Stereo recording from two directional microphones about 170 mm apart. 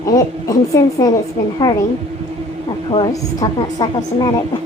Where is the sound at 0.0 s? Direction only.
20° left (ahead or behind).